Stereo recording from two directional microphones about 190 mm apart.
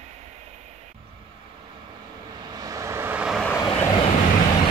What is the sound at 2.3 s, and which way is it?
Vehicle, 20° right (ahead or behind).